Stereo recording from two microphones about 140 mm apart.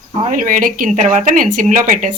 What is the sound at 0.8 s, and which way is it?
Speech, 60° right (ahead or behind).